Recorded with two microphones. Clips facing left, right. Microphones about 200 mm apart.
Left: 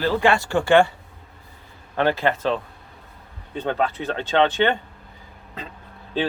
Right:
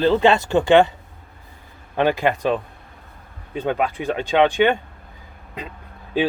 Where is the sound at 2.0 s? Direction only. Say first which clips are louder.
Right 2 dB; 15° right (ahead or behind).